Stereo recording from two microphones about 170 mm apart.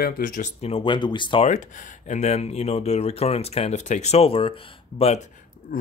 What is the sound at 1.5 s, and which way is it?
Speech, 45° left (ahead or behind).